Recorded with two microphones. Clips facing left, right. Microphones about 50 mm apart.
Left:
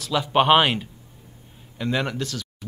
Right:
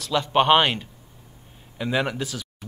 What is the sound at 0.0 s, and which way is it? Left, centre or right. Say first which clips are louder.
Speech: even; centre.